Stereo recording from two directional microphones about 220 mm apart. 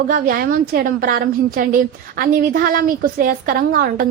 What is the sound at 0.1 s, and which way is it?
A woman's voice, 40° right (ahead or behind).